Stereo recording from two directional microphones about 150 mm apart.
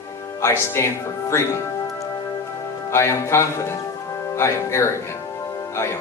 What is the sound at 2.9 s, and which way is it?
Speech, 20° left (ahead or behind).